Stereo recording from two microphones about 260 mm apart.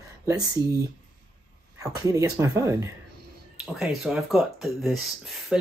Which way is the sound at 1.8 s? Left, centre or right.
Centre.